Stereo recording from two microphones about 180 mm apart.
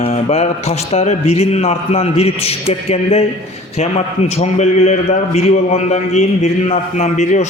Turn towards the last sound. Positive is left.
turn(degrees=40)  # may be behind; listen again after turning